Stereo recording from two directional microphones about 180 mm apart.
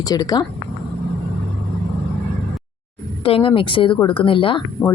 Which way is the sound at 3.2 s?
30° left (ahead or behind).